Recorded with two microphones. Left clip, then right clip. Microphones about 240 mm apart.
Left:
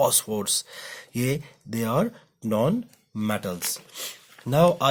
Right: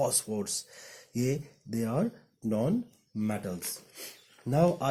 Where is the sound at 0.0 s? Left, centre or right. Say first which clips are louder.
Left 7 dB; left.